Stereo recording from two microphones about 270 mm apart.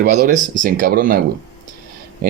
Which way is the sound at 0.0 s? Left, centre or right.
Right.